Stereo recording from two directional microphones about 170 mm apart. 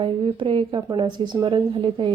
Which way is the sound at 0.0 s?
30° right (ahead or behind).